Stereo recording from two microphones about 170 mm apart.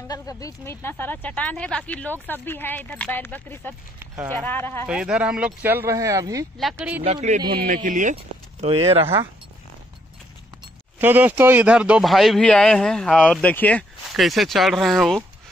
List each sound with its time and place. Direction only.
0.1 s speech: 20° left (ahead or behind)
4.0 s clip-clop: 15° right (ahead or behind)
4.3 s speech: 10° left (ahead or behind)
4.8 s speech: 5° right (ahead or behind)
7.0 s speech: 40° right (ahead or behind)
8.6 s speech: 35° right (ahead or behind)
11.0 s a man's voice: 10° right (ahead or behind)